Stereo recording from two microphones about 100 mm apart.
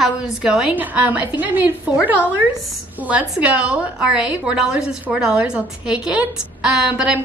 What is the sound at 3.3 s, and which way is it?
A woman's voice, 10° right (ahead or behind).